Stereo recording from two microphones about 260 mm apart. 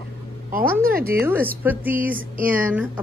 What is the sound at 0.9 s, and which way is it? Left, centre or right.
Speech, right.